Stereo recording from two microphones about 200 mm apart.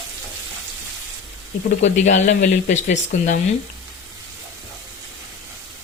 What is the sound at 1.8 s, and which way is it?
Speech, 35° left (ahead or behind).